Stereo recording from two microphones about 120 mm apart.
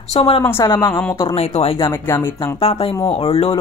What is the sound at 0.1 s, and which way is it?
Speech, 55° left (ahead or behind).